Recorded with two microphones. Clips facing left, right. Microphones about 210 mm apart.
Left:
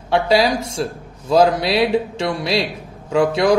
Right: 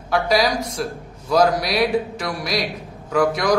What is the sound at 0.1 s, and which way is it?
A man's voice, 30° left (ahead or behind).